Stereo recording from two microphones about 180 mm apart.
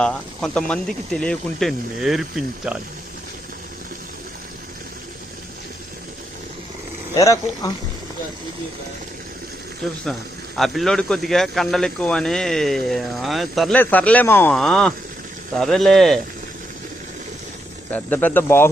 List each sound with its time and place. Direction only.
0.0 s speech: 5° left (ahead or behind)
7.2 s speech: 20° left (ahead or behind)
10.6 s speech: centre (ahead or behind)
17.9 s speech: 10° left (ahead or behind)